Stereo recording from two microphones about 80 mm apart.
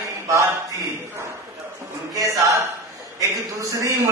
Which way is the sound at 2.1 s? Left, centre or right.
Right.